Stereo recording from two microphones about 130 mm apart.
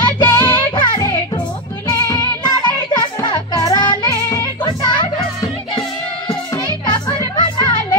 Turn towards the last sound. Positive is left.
turn(degrees=35)  # may be behind; listen again after turning